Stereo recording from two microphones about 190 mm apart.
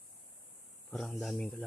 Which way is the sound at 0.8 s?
Centre (ahead or behind).